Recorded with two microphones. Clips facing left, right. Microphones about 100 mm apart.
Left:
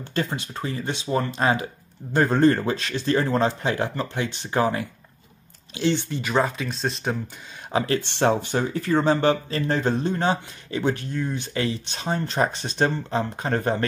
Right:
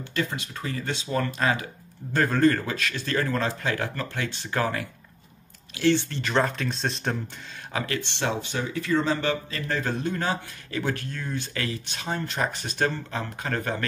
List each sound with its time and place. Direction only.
0.0 s speech: 30° left (ahead or behind); by 7.2 s centre (ahead or behind)
7.7 s speech: 30° left (ahead or behind)
8.0 s speech: 40° left (ahead or behind)